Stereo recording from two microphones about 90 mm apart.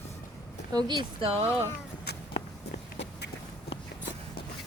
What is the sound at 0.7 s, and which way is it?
Speech, 55° right (ahead or behind).